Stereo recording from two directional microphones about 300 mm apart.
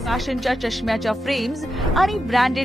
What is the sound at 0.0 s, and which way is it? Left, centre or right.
A woman's voice, centre.